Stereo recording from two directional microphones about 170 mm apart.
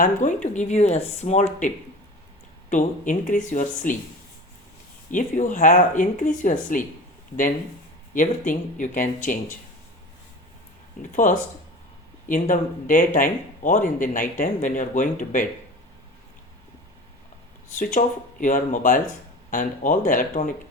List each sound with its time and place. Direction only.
0.0 s speech: 50° left (ahead or behind)
5.1 s speech: 50° left (ahead or behind)
8.1 s speech: 50° left (ahead or behind)
11.1 s speech: 50° left (ahead or behind)
17.7 s speech: 50° left (ahead or behind)